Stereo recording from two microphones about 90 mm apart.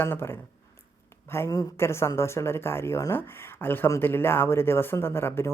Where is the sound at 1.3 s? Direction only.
25° left (ahead or behind).